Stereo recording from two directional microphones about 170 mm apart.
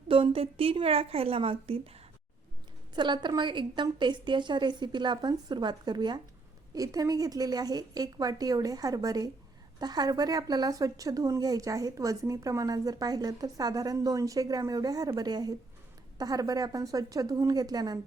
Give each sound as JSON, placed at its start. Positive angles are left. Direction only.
{"t": 0.1, "sound": "a woman's voice", "side_deg": -35}